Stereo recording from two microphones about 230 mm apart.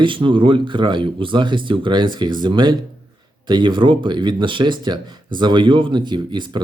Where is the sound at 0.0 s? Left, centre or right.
Right.